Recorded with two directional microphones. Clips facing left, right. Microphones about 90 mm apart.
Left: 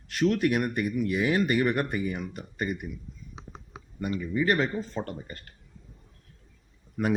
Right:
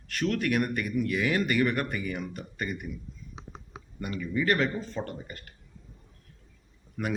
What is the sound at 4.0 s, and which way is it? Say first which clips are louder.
Speech: left 2 dB; 25° left (ahead or behind).